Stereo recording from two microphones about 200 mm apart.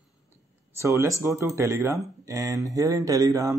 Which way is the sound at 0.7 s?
15° right (ahead or behind).